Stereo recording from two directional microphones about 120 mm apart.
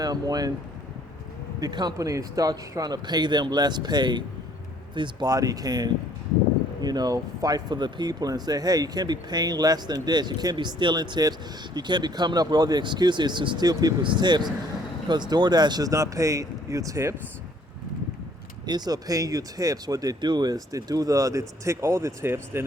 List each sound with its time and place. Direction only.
0.0 s speech: 35° right (ahead or behind)
1.6 s speech: 35° right (ahead or behind)
18.6 s speech: 35° right (ahead or behind)